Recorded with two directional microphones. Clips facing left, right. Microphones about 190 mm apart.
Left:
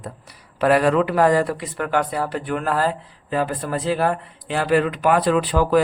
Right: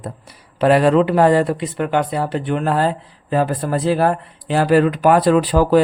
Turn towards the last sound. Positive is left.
turn(degrees=-35)  # may be behind; listen again after turning